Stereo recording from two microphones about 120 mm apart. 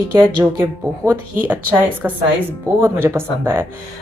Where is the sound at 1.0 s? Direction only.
15° right (ahead or behind).